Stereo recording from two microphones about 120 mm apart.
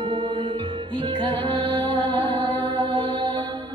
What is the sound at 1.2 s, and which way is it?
Music, 15° left (ahead or behind).